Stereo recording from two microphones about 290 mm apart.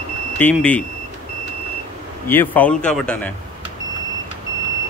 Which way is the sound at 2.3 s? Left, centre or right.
Centre.